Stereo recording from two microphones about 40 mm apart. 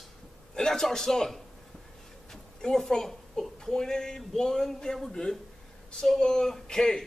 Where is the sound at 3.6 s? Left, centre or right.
Centre.